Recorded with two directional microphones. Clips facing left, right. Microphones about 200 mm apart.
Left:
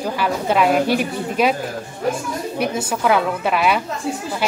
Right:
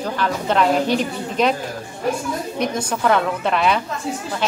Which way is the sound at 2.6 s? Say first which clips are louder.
Left 1 dB; 5° left (ahead or behind).